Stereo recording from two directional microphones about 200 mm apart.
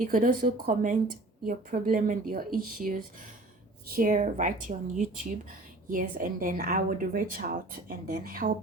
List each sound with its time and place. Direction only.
0.0 s a woman's voice: 45° right (ahead or behind)